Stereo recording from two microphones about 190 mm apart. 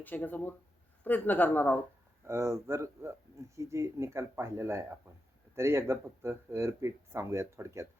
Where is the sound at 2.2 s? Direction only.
15° right (ahead or behind).